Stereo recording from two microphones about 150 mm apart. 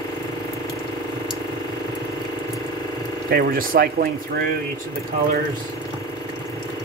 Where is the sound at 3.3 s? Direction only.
80° right.